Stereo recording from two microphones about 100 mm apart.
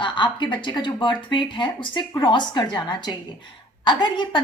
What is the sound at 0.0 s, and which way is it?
A woman's voice, 55° left (ahead or behind).